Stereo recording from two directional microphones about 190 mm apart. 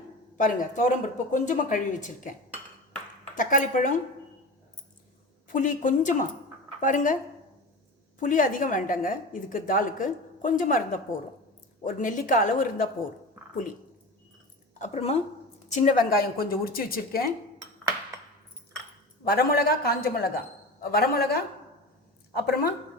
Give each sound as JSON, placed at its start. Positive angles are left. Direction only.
{"t": 0.3, "sound": "speech", "side_deg": 40}
{"t": 3.3, "sound": "a woman's voice", "side_deg": 45}
{"t": 5.5, "sound": "a woman's voice", "side_deg": 45}
{"t": 8.2, "sound": "a woman's voice", "side_deg": 45}
{"t": 14.8, "sound": "a woman's voice", "side_deg": 35}
{"t": 19.2, "sound": "a woman's voice", "side_deg": 50}